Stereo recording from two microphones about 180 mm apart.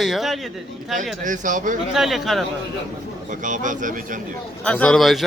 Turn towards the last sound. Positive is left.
turn(degrees=0)  # may be behind; listen again after turning